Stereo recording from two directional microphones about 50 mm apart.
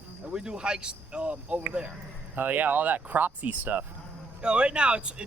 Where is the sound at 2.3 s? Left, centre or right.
Right.